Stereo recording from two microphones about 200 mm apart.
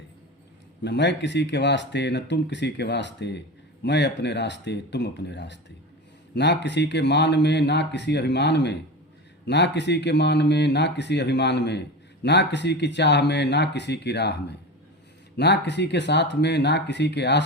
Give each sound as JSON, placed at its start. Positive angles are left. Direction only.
{"t": 0.8, "sound": "speech", "side_deg": 60}